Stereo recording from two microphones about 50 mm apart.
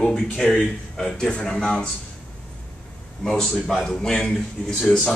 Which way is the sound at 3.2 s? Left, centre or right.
Centre.